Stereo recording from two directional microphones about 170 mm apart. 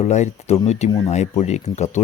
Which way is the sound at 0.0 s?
40° left (ahead or behind).